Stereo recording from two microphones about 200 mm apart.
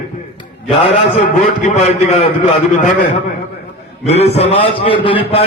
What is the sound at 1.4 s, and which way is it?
Speech, 35° left (ahead or behind).